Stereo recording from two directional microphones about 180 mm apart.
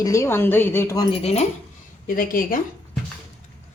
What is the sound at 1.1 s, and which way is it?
Speech, 35° left (ahead or behind).